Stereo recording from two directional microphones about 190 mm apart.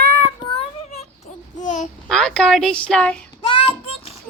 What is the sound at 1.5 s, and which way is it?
Babbling, 40° left (ahead or behind).